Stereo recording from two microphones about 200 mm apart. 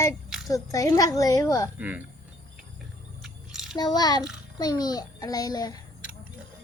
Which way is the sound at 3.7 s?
20° left (ahead or behind).